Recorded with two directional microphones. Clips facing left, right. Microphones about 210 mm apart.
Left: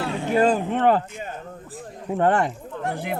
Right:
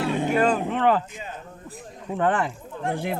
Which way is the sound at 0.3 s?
40° left (ahead or behind).